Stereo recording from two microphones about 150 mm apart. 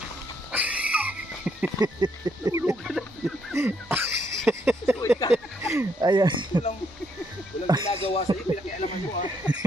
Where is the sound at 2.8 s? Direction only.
Centre (ahead or behind).